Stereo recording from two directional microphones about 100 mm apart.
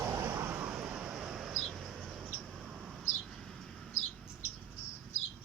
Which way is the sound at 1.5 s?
Centre (ahead or behind).